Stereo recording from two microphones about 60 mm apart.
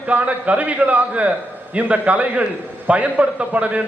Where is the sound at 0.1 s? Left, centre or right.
Right.